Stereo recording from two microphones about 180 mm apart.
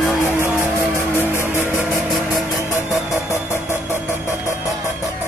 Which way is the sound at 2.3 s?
15° left (ahead or behind).